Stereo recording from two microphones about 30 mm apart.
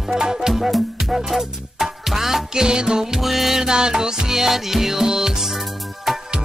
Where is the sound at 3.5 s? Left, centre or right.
Right; by 6.2 s centre.